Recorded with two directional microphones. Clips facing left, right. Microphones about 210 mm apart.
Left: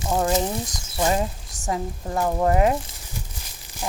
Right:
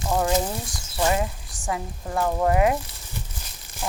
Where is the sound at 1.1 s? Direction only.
35° left (ahead or behind).